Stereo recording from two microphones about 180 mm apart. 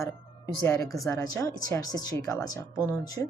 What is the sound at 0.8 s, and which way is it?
Speech, centre (ahead or behind).